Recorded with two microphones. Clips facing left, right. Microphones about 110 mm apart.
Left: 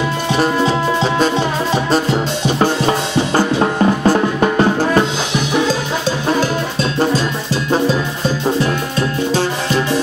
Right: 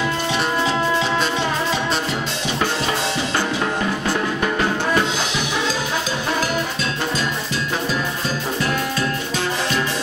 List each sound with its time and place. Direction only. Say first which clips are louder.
3.3 s music: left 9 dB; 35° left (ahead or behind)